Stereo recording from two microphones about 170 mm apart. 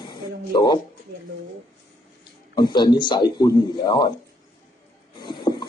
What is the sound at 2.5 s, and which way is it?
A man's voice, 25° left (ahead or behind).